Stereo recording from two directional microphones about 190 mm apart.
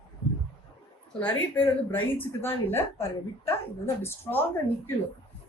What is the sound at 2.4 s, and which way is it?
Speech, 10° left (ahead or behind).